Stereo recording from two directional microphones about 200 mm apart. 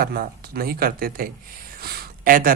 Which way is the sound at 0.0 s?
50° right (ahead or behind).